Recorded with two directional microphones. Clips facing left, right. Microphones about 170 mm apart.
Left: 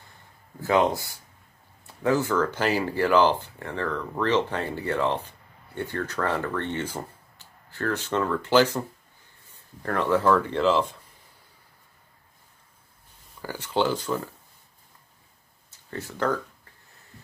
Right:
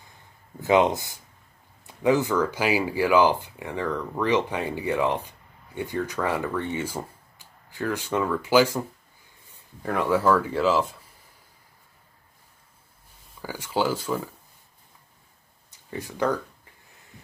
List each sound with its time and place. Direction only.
0.6 s speech: 20° right (ahead or behind)
13.4 s speech: 10° right (ahead or behind)
15.7 s speech: 15° right (ahead or behind)